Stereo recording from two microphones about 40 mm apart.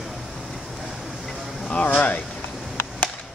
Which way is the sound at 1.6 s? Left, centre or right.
Left.